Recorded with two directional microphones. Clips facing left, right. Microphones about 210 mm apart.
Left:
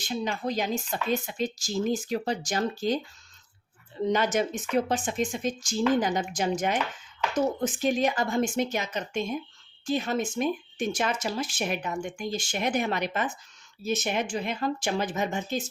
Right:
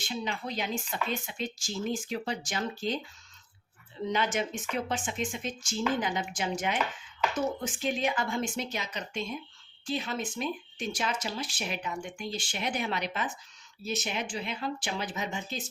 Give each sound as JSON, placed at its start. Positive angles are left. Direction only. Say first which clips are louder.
{"t": 0.1, "sound": "speech", "louder": "left 6 dB", "side_deg": 45}
{"t": 4.1, "sound": "speech", "louder": "left 4 dB", "side_deg": 45}